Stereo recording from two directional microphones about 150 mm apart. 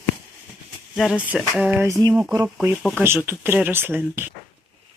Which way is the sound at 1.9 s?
25° right (ahead or behind).